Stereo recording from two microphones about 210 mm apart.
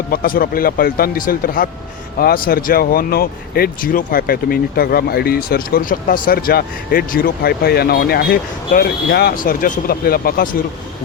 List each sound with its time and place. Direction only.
0.1 s speech: 45° left (ahead or behind)